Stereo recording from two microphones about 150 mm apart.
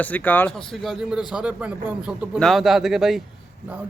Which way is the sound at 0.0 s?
10° left (ahead or behind).